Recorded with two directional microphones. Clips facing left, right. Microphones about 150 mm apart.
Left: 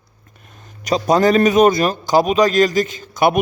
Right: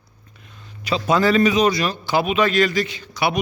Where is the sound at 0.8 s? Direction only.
40° left (ahead or behind).